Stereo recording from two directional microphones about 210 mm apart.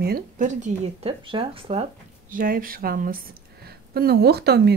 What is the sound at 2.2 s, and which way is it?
A woman's voice, 40° right (ahead or behind).